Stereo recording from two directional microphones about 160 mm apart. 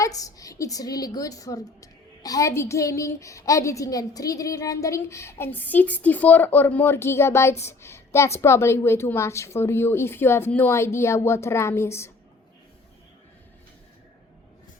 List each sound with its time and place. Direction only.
0.0 s a woman's voice: 20° left (ahead or behind)